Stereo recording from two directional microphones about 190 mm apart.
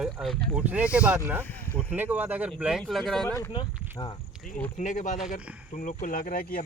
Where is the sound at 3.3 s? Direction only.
20° left (ahead or behind).